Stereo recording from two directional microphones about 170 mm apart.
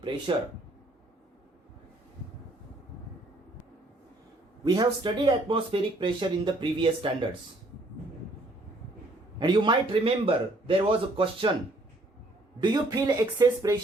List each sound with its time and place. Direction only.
0.3 s a man's voice: 30° right (ahead or behind)
4.6 s speech: 25° right (ahead or behind)
9.4 s a man's voice: 25° right (ahead or behind)
12.5 s speech: 25° right (ahead or behind)